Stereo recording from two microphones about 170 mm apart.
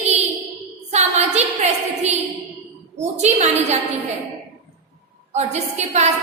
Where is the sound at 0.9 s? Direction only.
40° right (ahead or behind).